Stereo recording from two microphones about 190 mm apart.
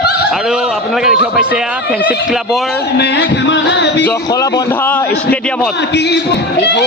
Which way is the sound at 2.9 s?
65° left (ahead or behind).